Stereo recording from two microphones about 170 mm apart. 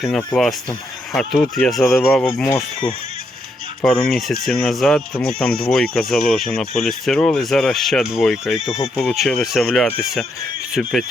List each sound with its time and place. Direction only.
0.0 s speech: 5° left (ahead or behind)
3.8 s speech: centre (ahead or behind)